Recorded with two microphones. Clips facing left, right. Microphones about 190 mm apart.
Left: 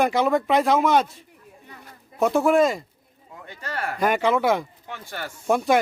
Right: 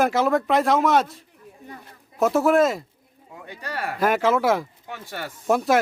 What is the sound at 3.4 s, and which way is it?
Speech, 15° right (ahead or behind).